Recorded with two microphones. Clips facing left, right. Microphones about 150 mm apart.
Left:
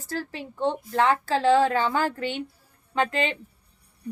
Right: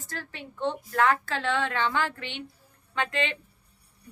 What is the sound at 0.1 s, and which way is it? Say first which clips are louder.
A woman's voice: left 8 dB; 35° left (ahead or behind).